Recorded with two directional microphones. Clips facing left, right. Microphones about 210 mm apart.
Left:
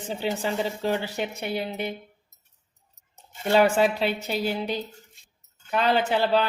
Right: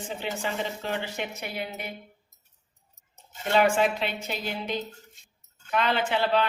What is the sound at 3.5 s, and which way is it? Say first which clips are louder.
A woman's voice: left 3 dB; 40° left (ahead or behind).